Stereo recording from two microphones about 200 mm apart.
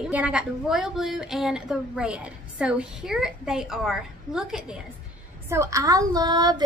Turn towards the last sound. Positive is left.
turn(degrees=-20)  # may be behind; listen again after turning